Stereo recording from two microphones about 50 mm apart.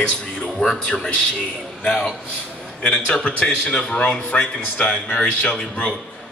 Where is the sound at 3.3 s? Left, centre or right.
Left.